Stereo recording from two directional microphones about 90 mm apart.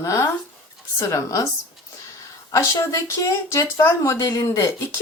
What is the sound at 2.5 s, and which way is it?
Speech, 35° left (ahead or behind).